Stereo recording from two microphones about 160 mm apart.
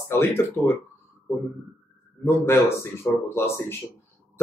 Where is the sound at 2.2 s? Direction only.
15° left (ahead or behind).